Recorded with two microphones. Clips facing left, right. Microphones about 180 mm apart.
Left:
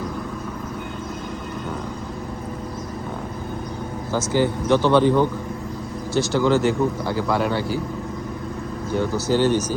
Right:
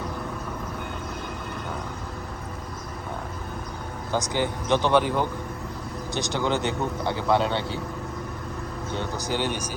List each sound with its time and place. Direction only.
4.1 s speech: 20° right (ahead or behind)
6.1 s speech: 15° right (ahead or behind)
8.9 s speech: 15° right (ahead or behind)